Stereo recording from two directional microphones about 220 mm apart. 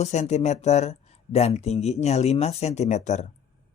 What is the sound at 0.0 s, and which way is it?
Speech, 30° left (ahead or behind).